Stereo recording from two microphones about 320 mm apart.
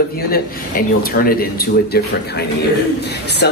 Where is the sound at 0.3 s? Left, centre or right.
Left.